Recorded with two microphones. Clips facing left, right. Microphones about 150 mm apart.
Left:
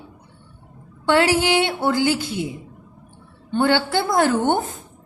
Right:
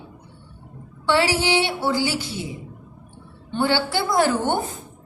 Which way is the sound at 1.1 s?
50° left (ahead or behind).